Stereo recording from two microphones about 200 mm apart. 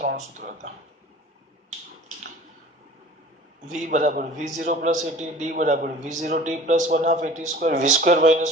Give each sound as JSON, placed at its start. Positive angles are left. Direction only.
{"t": 0.0, "sound": "speech", "side_deg": -40}
{"t": 3.7, "sound": "speech", "side_deg": -40}